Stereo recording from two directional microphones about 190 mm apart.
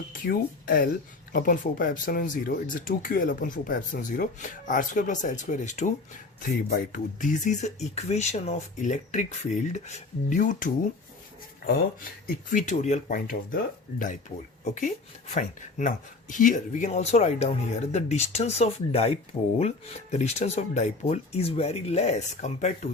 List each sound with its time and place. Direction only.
0.1 s speech: 50° left (ahead or behind)
12.5 s speech: 40° left (ahead or behind)
14.6 s speech: 40° left (ahead or behind)